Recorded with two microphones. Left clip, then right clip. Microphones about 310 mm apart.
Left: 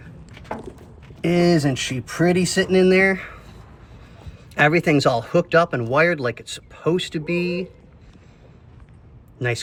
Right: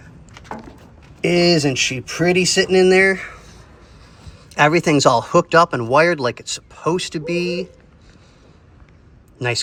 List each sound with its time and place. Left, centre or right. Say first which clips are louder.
1.2 s speech: right 3 dB; centre
4.5 s speech: right 2 dB; centre